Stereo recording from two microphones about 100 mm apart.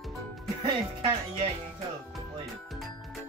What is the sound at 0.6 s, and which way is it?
Music, 65° right (ahead or behind).